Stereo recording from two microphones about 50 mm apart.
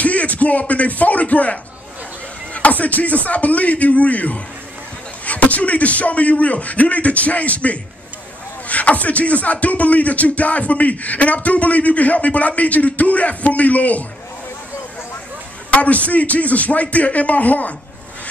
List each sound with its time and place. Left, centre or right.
0.0 s speech: left
2.5 s a sound: left
3.3 s speech: left
15.7 s speech: left